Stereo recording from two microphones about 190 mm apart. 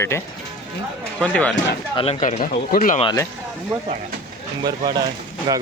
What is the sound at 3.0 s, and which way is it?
Speech, 15° left (ahead or behind).